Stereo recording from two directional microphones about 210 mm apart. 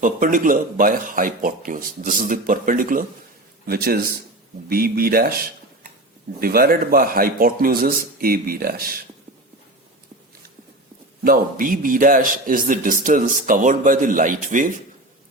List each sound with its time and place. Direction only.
0.0 s a man's voice: 40° right (ahead or behind)
11.2 s a man's voice: 45° right (ahead or behind)